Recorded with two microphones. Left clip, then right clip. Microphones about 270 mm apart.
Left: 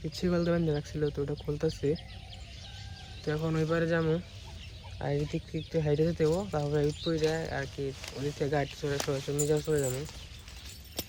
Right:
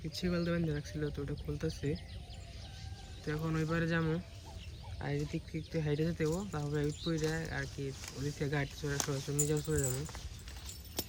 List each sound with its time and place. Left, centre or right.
0.2 s speech: centre
0.8 s speech: left
1.5 s speech: centre
3.2 s speech: centre